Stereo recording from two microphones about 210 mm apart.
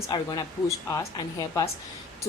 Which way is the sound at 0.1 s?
20° left (ahead or behind).